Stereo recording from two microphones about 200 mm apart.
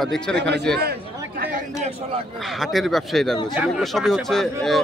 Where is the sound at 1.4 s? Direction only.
40° right (ahead or behind).